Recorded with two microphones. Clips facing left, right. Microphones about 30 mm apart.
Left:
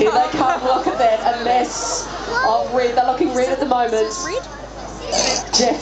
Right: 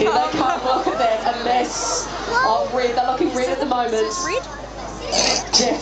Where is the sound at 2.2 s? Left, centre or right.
Centre.